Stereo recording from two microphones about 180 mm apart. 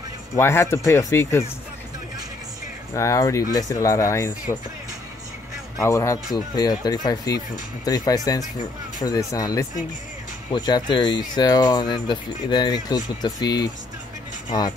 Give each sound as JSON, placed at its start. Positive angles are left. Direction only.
{"t": 0.4, "sound": "speech", "side_deg": 15}
{"t": 2.9, "sound": "speech", "side_deg": 15}
{"t": 5.8, "sound": "speech", "side_deg": 15}